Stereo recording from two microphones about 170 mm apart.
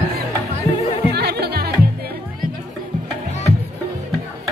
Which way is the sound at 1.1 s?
70° right (ahead or behind).